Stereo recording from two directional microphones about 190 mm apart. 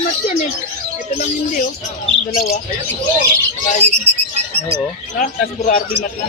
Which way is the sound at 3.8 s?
35° right (ahead or behind).